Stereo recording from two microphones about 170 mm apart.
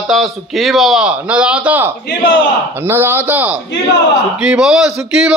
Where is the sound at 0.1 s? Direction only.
Centre (ahead or behind).